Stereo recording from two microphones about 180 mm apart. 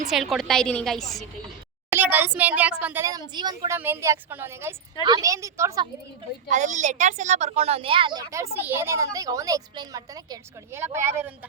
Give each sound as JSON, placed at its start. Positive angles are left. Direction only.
{"t": 0.1, "sound": "a woman's voice", "side_deg": 0}
{"t": 1.9, "sound": "a child's voice", "side_deg": -10}
{"t": 3.8, "sound": "a child's voice", "side_deg": -10}
{"t": 6.5, "sound": "a woman's voice", "side_deg": -45}